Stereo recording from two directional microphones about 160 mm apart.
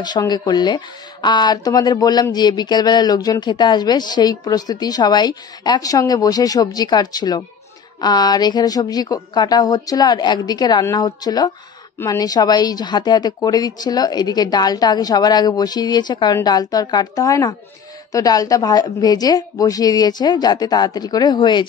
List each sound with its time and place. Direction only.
0.0 s speech: 25° left (ahead or behind)